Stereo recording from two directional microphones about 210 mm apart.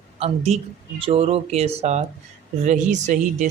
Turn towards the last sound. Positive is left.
turn(degrees=-35)  # may be behind; listen again after turning